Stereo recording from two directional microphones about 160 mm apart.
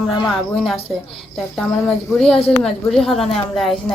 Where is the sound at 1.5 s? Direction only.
Centre (ahead or behind).